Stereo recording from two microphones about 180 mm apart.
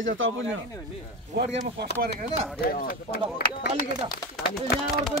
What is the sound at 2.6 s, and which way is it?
Speech, 55° left (ahead or behind).